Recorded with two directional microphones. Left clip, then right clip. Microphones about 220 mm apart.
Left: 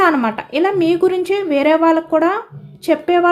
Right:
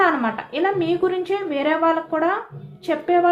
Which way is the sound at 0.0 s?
55° left (ahead or behind).